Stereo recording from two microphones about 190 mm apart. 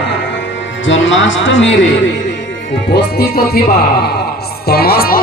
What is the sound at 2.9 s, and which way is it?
Speech, 55° left (ahead or behind).